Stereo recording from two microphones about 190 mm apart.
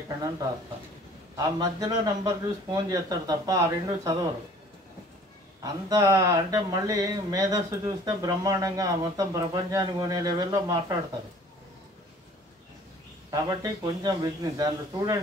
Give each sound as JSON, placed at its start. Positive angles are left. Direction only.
{"t": 1.3, "sound": "a man's voice", "side_deg": -20}
{"t": 5.6, "sound": "speech", "side_deg": -20}
{"t": 13.3, "sound": "a man's voice", "side_deg": -20}